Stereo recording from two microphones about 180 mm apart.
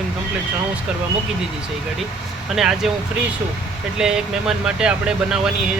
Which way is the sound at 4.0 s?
5° right (ahead or behind).